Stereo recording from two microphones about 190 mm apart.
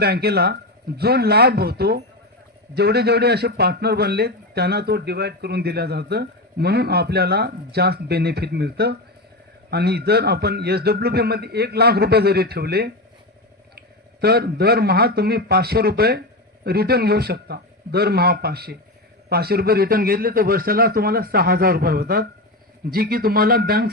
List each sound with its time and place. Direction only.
0.0 s a man's voice: 55° right (ahead or behind)